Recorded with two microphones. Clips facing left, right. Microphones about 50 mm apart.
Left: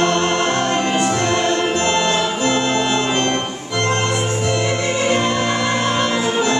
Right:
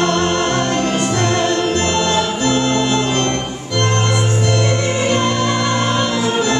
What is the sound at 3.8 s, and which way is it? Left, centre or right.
Organ, left.